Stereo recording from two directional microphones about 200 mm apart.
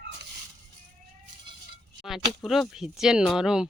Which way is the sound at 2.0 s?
Centre (ahead or behind).